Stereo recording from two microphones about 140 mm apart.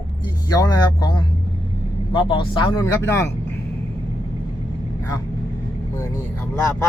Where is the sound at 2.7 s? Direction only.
20° left (ahead or behind).